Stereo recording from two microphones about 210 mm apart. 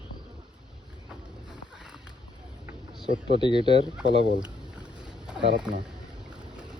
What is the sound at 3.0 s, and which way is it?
Speech, 25° right (ahead or behind).